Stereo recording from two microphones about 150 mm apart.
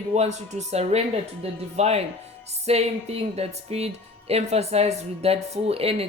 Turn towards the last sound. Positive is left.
turn(degrees=-40)  # may be behind; listen again after turning